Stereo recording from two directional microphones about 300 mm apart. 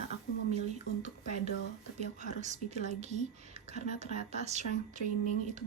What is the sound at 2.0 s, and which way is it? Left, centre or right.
Speech, right.